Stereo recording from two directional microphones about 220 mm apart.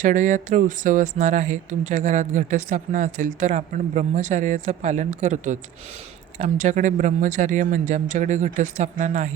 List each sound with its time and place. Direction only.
0.0 s speech: 35° right (ahead or behind)